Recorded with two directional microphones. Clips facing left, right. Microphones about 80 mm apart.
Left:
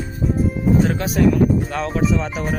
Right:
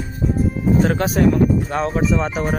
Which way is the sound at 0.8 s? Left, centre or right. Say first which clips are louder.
Right 3 dB; right.